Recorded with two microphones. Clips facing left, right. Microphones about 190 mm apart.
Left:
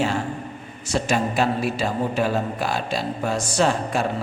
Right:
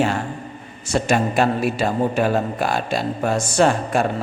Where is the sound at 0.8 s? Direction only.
55° right (ahead or behind).